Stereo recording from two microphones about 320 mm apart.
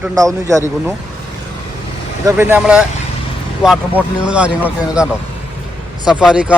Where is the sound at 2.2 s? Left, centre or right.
Centre.